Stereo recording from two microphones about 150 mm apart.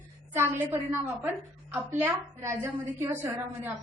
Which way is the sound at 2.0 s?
15° right (ahead or behind).